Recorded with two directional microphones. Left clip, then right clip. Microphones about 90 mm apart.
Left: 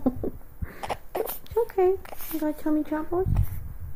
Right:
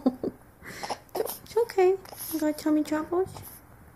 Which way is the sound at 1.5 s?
5° left (ahead or behind).